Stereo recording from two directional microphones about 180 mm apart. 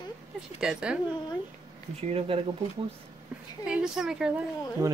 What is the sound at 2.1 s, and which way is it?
Speech, 30° right (ahead or behind).